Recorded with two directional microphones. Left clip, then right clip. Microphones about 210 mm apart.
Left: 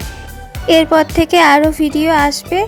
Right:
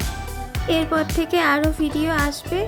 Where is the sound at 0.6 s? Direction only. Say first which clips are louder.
Left 11 dB; 35° left (ahead or behind).